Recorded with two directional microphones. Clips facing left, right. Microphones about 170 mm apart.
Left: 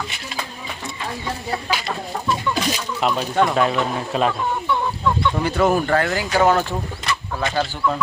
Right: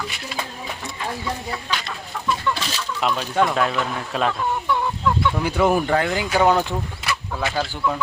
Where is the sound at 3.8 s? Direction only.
30° left (ahead or behind).